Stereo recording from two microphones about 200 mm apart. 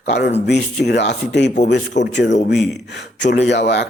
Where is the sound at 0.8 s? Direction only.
60° left (ahead or behind).